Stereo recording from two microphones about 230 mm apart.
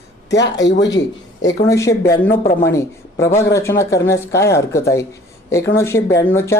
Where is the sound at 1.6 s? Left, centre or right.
Centre.